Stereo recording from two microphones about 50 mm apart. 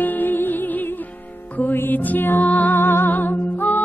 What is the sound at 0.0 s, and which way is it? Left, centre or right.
Music, left.